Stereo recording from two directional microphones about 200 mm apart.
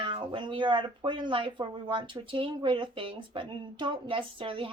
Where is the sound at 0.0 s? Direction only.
25° right (ahead or behind).